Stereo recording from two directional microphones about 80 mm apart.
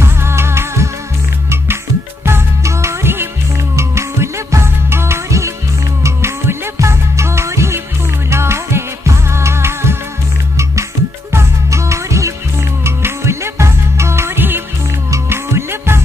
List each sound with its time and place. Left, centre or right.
0.0 s music: right
2.2 s music: right
11.3 s music: right